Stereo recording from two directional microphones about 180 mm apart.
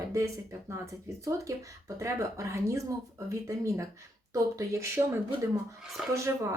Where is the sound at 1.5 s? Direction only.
20° right (ahead or behind).